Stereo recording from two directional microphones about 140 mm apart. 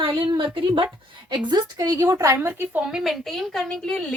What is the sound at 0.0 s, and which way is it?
A woman's voice, 35° right (ahead or behind).